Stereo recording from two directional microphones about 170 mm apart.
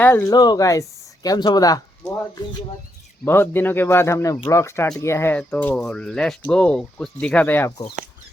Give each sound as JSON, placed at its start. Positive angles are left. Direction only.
{"t": 0.0, "sound": "speech", "side_deg": 15}
{"t": 3.2, "sound": "speech", "side_deg": 15}